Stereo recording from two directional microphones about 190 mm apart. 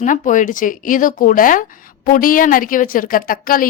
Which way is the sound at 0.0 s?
40° left (ahead or behind).